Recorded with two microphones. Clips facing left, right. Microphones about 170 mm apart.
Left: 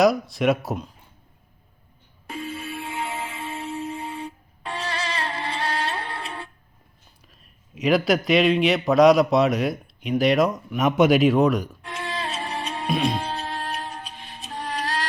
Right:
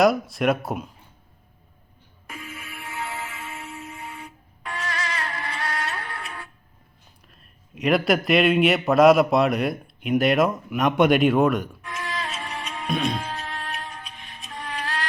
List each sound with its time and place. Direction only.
0.0 s a man's voice: centre (ahead or behind)
2.2 s music: 30° left (ahead or behind)
7.8 s a man's voice: centre (ahead or behind)
11.8 s music: 30° left (ahead or behind)